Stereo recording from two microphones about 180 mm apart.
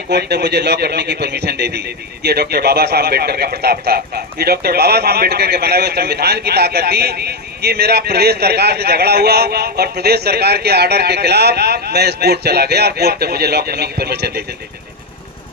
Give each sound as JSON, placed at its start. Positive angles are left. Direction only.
{"t": 0.1, "sound": "speech", "side_deg": -65}